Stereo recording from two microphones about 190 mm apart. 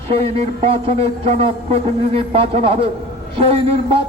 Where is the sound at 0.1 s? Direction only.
30° right (ahead or behind).